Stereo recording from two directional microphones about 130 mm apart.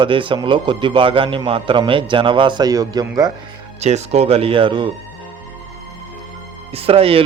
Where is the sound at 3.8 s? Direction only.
55° right (ahead or behind); by 4.9 s 40° right (ahead or behind).